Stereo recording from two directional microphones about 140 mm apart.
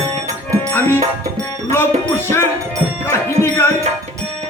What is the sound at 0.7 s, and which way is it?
Music, 15° left (ahead or behind).